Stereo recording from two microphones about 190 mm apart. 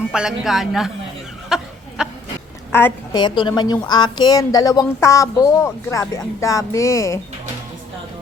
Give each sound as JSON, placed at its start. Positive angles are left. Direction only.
{"t": 0.1, "sound": "a woman's voice", "side_deg": -5}
{"t": 1.5, "sound": "a sound", "side_deg": 0}
{"t": 2.7, "sound": "a woman's voice", "side_deg": 10}
{"t": 3.2, "sound": "speech", "side_deg": 25}